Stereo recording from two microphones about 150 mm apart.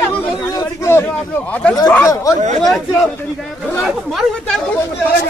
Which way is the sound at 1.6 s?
10° left (ahead or behind).